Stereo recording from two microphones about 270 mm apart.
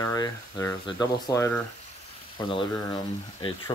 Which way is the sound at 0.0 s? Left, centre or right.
Centre.